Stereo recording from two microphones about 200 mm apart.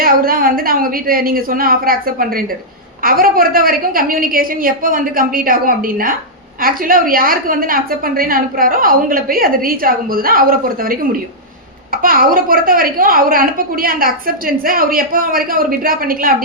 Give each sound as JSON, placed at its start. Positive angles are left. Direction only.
{"t": 0.0, "sound": "a woman's voice", "side_deg": -45}
{"t": 12.0, "sound": "a woman's voice", "side_deg": -45}